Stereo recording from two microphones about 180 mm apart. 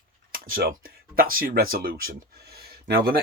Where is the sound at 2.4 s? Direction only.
60° right (ahead or behind).